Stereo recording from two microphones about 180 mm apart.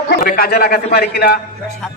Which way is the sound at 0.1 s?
55° left (ahead or behind).